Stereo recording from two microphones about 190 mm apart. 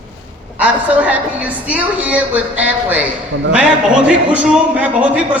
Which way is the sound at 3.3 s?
75° right (ahead or behind).